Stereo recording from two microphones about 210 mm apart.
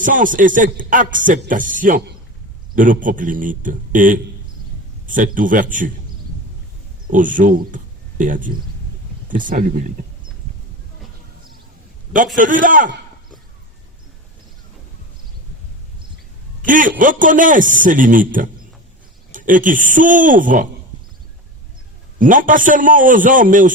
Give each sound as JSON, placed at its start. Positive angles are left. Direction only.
{"t": 0.0, "sound": "a man's voice", "side_deg": -40}
{"t": 7.1, "sound": "a man's voice", "side_deg": -40}
{"t": 12.4, "sound": "a man's voice", "side_deg": -40}
{"t": 16.6, "sound": "a man's voice", "side_deg": -40}
{"t": 22.2, "sound": "a man's voice", "side_deg": -40}